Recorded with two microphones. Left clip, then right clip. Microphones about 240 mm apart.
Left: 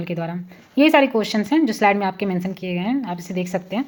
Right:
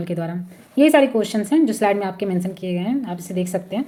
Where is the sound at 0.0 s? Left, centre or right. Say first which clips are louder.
Right 1 dB; centre.